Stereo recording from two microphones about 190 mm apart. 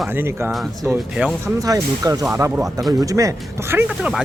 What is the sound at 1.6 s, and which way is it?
A man's voice, 20° right (ahead or behind).